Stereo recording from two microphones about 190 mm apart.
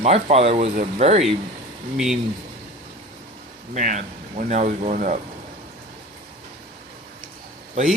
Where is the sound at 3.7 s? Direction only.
40° right (ahead or behind).